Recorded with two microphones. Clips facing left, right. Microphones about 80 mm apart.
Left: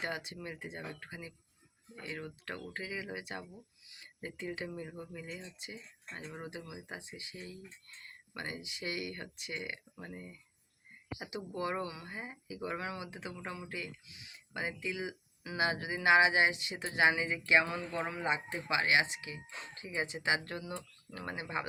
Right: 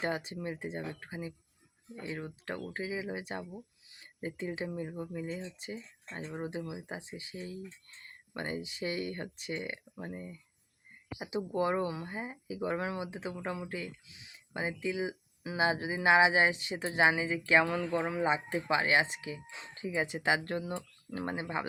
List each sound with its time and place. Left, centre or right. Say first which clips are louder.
0.0 s speech: right 5 dB; right
6.3 s speech: right 9 dB; right
17.9 s speech: right 4 dB; right